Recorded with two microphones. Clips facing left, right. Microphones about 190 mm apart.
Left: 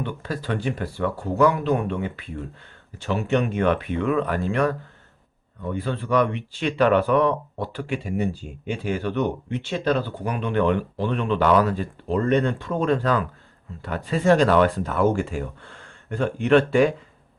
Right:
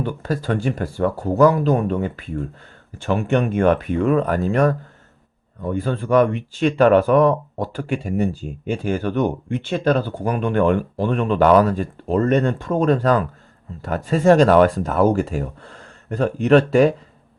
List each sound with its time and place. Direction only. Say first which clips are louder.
0.0 s speech: right 5 dB; 45° right (ahead or behind)